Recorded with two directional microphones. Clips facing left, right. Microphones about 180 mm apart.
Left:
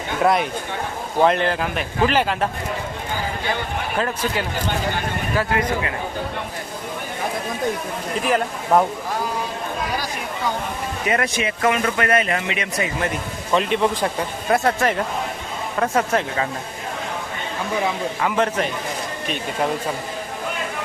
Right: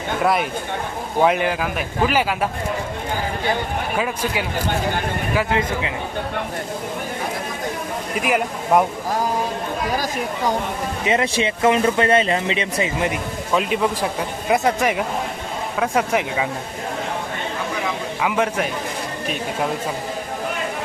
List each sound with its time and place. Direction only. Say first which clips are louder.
0.2 s speech: left 2 dB; centre (ahead or behind)
3.9 s speech: left 1 dB; 10° right (ahead or behind)
5.5 s speech: even; 25° right (ahead or behind)
8.2 s speech: even; 10° right (ahead or behind)
9.9 s speech: right 4 dB; 45° right (ahead or behind)
11.0 s speech: right 2 dB; 25° right (ahead or behind)
13.5 s speech: left 1 dB; 5° right (ahead or behind)
18.2 s speech: right 1 dB; 5° right (ahead or behind)